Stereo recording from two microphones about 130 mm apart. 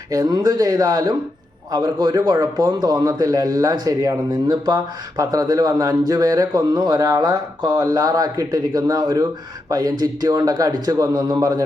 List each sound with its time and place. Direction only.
0.1 s a man's voice: 30° right (ahead or behind)